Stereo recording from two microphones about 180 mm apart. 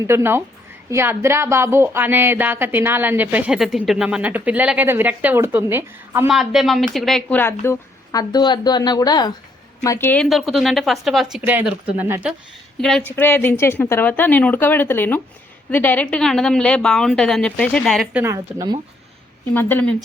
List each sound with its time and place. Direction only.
0.1 s a woman's voice: 15° right (ahead or behind)
6.2 s a woman's voice: centre (ahead or behind)
10.2 s a woman's voice: centre (ahead or behind)
12.8 s a woman's voice: 5° left (ahead or behind)
18.2 s a woman's voice: 20° right (ahead or behind)
19.5 s a woman's voice: 10° left (ahead or behind)